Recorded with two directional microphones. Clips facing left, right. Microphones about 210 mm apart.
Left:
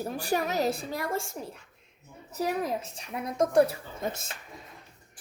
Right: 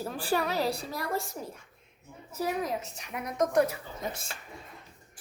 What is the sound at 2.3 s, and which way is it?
A woman's voice, 35° left (ahead or behind).